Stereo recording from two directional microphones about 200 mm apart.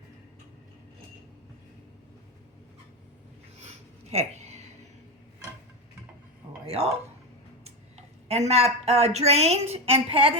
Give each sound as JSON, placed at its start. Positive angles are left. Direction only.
{"t": 4.1, "sound": "a sound", "side_deg": -35}
{"t": 6.7, "sound": "a woman's voice", "side_deg": -30}
{"t": 8.3, "sound": "a woman's voice", "side_deg": -30}